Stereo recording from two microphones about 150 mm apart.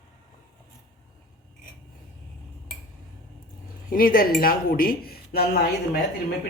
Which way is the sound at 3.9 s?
75° left (ahead or behind).